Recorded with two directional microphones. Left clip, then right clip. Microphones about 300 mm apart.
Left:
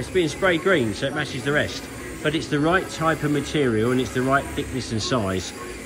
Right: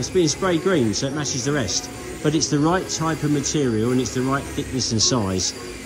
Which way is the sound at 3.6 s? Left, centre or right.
Centre.